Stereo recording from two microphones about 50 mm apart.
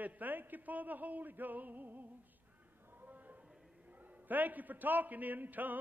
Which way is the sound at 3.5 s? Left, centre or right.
Centre.